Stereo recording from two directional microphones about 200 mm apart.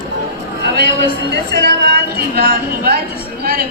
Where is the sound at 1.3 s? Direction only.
55° right (ahead or behind).